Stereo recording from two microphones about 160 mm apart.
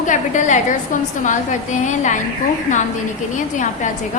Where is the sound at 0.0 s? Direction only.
50° left (ahead or behind).